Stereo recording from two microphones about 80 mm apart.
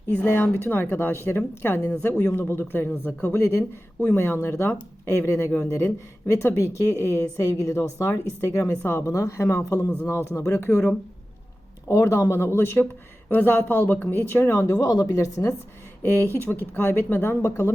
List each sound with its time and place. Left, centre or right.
0.3 s speech: left
16.0 s speech: left